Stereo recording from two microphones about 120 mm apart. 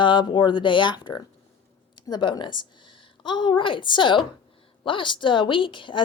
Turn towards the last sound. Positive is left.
turn(degrees=45)  # may be behind; listen again after turning